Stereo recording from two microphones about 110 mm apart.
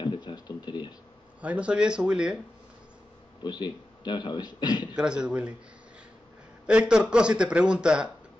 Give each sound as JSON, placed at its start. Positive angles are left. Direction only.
{"t": 0.0, "sound": "a sound", "side_deg": 45}
{"t": 1.4, "sound": "speech", "side_deg": -10}
{"t": 3.4, "sound": "a man's voice", "side_deg": 40}
{"t": 4.9, "sound": "speech", "side_deg": -10}
{"t": 6.6, "sound": "speech", "side_deg": -10}